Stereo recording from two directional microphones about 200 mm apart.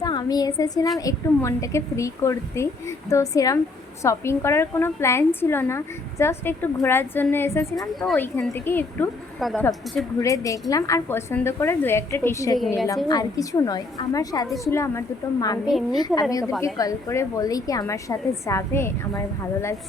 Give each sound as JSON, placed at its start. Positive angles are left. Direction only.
{"t": 0.0, "sound": "a woman's voice", "side_deg": 20}
{"t": 12.5, "sound": "a woman's voice", "side_deg": 0}
{"t": 13.1, "sound": "a woman's voice", "side_deg": 20}